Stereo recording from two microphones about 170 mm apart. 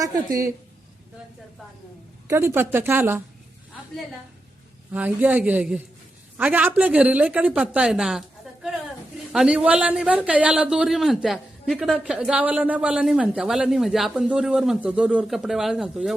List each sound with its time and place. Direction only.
0.0 s a woman's voice: 20° right (ahead or behind)
2.2 s speech: 15° right (ahead or behind)
4.9 s speech: 10° right (ahead or behind)
9.3 s a man's voice: 5° right (ahead or behind)